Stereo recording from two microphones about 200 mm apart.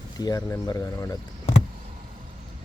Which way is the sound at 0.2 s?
20° left (ahead or behind).